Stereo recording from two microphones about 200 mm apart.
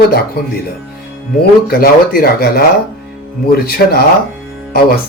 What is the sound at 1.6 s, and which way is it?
Speech, 50° left (ahead or behind).